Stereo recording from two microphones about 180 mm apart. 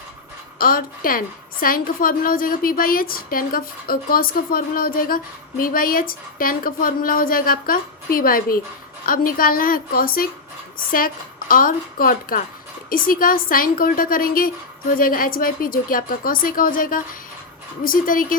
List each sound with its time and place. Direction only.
0.6 s a woman's voice: 55° left (ahead or behind)